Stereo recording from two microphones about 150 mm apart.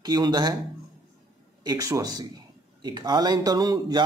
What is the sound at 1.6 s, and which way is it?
A man's voice, 25° right (ahead or behind).